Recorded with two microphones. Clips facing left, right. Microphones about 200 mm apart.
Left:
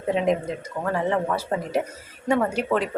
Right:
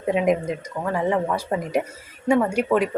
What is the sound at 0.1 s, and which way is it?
A woman's voice, 15° right (ahead or behind).